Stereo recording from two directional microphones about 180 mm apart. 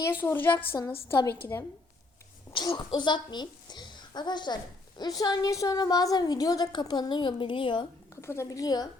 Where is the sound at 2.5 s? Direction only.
25° left (ahead or behind).